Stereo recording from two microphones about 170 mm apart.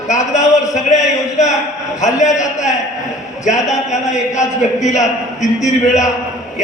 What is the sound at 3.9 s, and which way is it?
A man's voice, 45° left (ahead or behind).